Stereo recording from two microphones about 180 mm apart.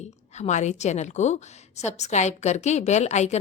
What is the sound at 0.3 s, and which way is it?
A woman's voice, 40° left (ahead or behind).